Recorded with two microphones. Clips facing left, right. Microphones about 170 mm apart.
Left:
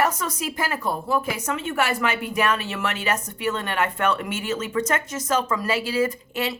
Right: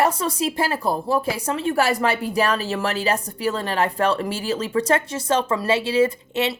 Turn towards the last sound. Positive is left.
turn(degrees=-25)  # may be behind; listen again after turning